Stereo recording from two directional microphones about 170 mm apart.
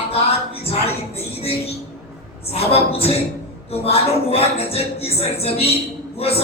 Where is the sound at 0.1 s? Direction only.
35° left (ahead or behind).